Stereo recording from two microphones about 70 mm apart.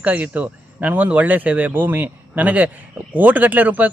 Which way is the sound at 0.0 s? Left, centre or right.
Right.